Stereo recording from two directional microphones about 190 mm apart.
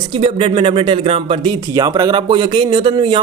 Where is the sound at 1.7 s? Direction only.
20° right (ahead or behind).